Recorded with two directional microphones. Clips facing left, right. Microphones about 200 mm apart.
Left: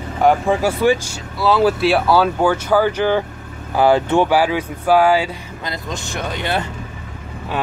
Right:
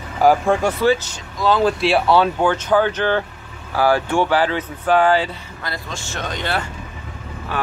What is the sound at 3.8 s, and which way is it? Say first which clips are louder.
Speech: left 3 dB; 20° left (ahead or behind).